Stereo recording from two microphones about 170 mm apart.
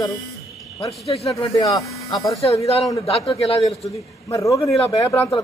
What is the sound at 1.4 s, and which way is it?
Speech, 20° left (ahead or behind).